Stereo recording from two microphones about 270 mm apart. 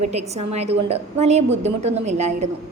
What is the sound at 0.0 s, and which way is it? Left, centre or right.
A woman's voice, right.